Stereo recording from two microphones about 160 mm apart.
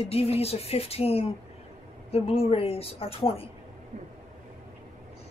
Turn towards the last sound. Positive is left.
turn(degrees=35)  # may be behind; listen again after turning